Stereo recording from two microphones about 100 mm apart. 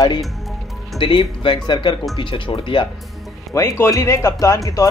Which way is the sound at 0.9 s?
60° left (ahead or behind).